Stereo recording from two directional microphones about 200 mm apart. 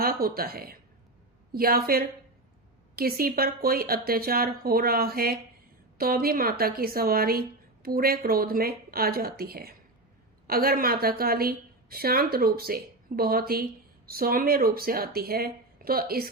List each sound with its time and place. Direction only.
0.0 s speech: 50° right (ahead or behind)